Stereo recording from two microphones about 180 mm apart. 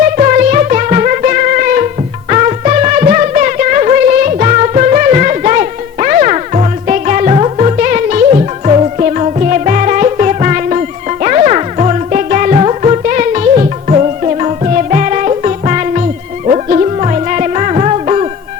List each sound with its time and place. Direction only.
0.0 s music: 45° right (ahead or behind)